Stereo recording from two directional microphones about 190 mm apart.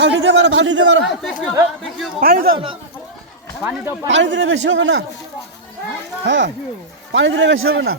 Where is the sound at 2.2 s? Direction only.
50° right (ahead or behind).